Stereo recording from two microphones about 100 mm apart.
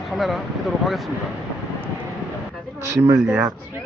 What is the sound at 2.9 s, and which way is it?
Speech, 30° right (ahead or behind).